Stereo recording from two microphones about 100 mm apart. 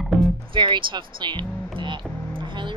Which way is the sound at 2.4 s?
50° right (ahead or behind).